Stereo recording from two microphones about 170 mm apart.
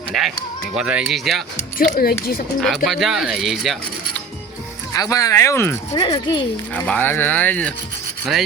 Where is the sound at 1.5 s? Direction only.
55° left (ahead or behind).